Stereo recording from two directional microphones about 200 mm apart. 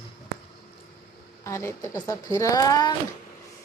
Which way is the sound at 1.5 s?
15° left (ahead or behind).